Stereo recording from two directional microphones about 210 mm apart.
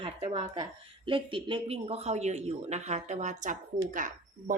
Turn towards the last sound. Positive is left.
turn(degrees=-40)  # may be behind; listen again after turning